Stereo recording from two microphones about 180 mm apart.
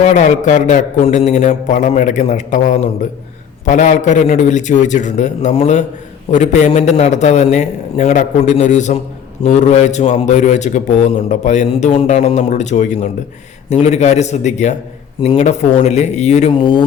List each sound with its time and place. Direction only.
0.0 s a man's voice: 40° left (ahead or behind)